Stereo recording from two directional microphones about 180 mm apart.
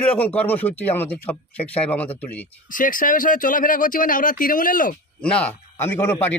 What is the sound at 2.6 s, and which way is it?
Speech, 50° left (ahead or behind).